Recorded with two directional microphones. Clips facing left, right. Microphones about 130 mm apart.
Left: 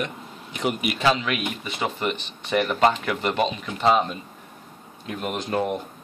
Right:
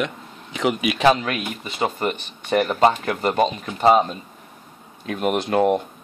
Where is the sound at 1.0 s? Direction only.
50° right (ahead or behind).